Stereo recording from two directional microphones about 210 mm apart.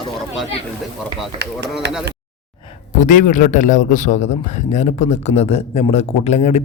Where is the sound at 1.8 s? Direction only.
50° right (ahead or behind).